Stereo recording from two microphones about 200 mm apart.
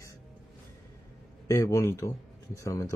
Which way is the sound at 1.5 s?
15° left (ahead or behind).